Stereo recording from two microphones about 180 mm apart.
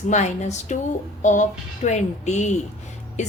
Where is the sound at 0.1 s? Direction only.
40° left (ahead or behind).